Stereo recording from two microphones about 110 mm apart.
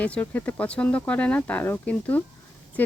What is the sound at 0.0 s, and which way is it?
Speech, 15° left (ahead or behind).